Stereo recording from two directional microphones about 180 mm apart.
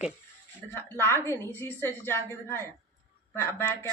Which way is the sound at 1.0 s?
15° left (ahead or behind).